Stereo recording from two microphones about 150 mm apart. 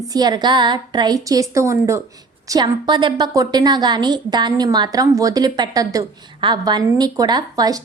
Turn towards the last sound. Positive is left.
turn(degrees=-25)  # may be behind; listen again after turning